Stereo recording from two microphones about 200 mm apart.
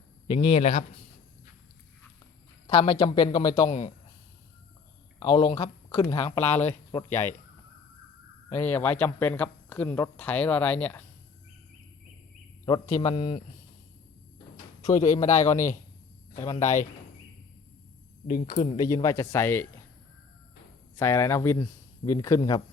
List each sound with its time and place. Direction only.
0.3 s a man's voice: 30° left (ahead or behind)
2.6 s a woman's voice: 25° left (ahead or behind)
5.2 s a woman's voice: 20° left (ahead or behind)
6.2 s a man's voice: 30° left (ahead or behind)
6.9 s speech: 10° left (ahead or behind)
8.4 s speech: 10° left (ahead or behind)
12.6 s a woman's voice: 20° left (ahead or behind)
14.5 s a sound: 35° left (ahead or behind)
15.3 s speech: 15° left (ahead or behind)
15.5 s a man's voice: 40° left (ahead or behind)
16.4 s speech: 15° left (ahead or behind)
18.4 s a man's voice: 30° left (ahead or behind)
18.8 s speech: 15° left (ahead or behind)
20.9 s speech: 10° left (ahead or behind)